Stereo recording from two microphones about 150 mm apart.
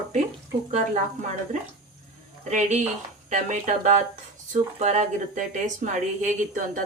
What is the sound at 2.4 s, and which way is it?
Speech, 55° right (ahead or behind).